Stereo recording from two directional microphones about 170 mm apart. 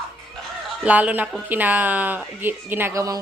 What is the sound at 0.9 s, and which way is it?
A woman's voice, 10° right (ahead or behind).